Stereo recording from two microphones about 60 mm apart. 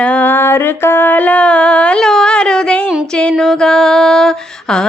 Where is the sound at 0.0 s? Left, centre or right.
Left.